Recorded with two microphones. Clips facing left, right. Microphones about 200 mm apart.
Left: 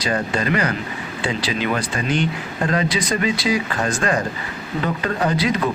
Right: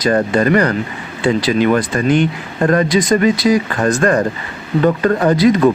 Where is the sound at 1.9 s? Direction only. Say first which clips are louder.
Right 7 dB; 55° right (ahead or behind).